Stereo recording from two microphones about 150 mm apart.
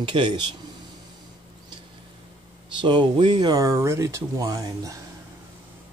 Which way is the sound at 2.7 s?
30° right (ahead or behind).